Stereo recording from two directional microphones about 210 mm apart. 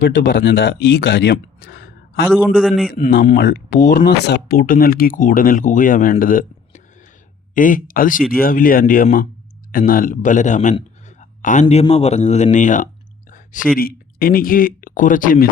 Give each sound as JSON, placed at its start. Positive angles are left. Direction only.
{"t": 0.0, "sound": "speech", "side_deg": 60}
{"t": 1.0, "sound": "a sound", "side_deg": 55}
{"t": 2.3, "sound": "a man's voice", "side_deg": 0}
{"t": 2.9, "sound": "a man's voice", "side_deg": 40}
{"t": 13.3, "sound": "a sound", "side_deg": 40}
{"t": 13.7, "sound": "speech", "side_deg": 45}